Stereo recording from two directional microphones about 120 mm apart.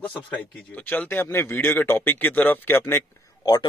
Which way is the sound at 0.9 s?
15° left (ahead or behind).